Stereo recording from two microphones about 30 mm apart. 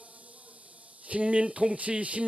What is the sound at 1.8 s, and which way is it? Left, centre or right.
Speech, right.